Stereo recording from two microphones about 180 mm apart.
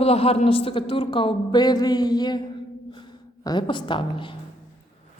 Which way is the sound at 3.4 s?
25° left (ahead or behind).